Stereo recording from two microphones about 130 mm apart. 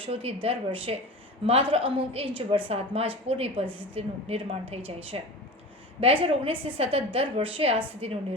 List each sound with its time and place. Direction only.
0.0 s a woman's voice: 50° right (ahead or behind)